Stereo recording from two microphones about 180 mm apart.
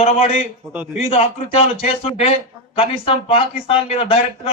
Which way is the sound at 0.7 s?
10° right (ahead or behind).